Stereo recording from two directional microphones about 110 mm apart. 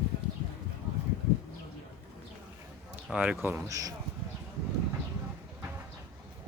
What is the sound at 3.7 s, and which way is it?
Speech, 30° right (ahead or behind).